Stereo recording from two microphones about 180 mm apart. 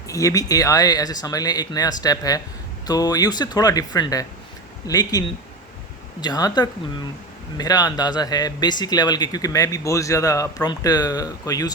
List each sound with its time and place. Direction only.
0.1 s a man's voice: 20° left (ahead or behind)
6.2 s a man's voice: 20° left (ahead or behind)